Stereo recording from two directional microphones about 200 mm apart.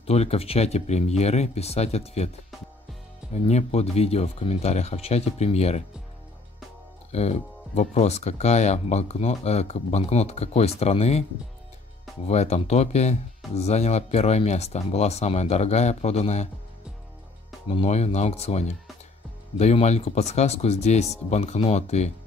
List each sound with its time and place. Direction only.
0.0 s speech: 30° left (ahead or behind)
3.3 s speech: 35° left (ahead or behind)
7.1 s speech: 30° left (ahead or behind)
12.3 s speech: 35° left (ahead or behind)
17.6 s speech: 30° left (ahead or behind)